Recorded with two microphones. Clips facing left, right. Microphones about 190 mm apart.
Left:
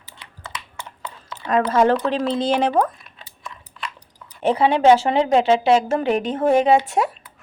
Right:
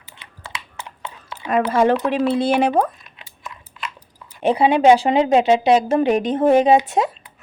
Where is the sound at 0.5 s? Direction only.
10° right (ahead or behind).